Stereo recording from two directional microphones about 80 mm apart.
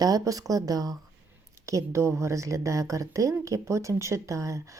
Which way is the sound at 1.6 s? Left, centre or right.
Right.